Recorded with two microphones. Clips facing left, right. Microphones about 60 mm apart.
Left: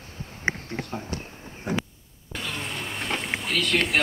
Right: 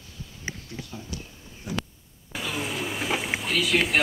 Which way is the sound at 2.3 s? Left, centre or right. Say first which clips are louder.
Right 2 dB; centre.